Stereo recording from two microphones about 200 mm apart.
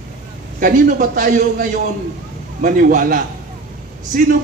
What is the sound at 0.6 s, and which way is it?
A man's voice, 45° right (ahead or behind).